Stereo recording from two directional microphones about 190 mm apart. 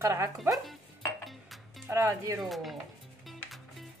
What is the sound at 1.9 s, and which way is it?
Speech, 15° right (ahead or behind).